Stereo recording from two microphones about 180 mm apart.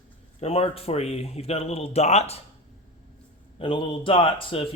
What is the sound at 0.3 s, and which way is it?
A man's voice, 35° left (ahead or behind).